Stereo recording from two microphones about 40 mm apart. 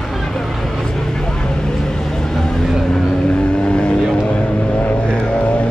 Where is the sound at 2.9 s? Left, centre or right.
Left.